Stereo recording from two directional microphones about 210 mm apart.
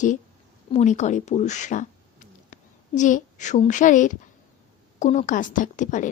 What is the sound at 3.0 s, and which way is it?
A woman's voice, 35° left (ahead or behind).